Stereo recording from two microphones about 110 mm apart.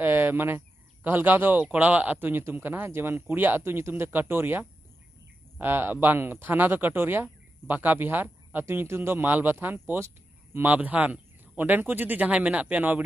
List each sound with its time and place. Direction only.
0.0 s speech: 20° right (ahead or behind)